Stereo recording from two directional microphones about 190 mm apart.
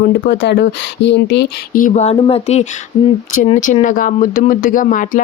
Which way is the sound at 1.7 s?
40° left (ahead or behind).